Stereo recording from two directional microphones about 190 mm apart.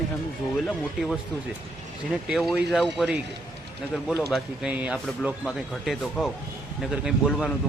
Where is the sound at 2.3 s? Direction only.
Centre (ahead or behind).